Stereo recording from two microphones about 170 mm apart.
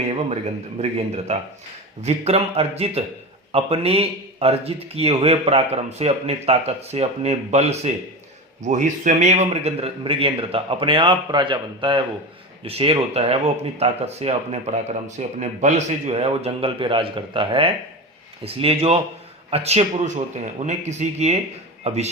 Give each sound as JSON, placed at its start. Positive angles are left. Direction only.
{"t": 0.8, "sound": "speech", "side_deg": -40}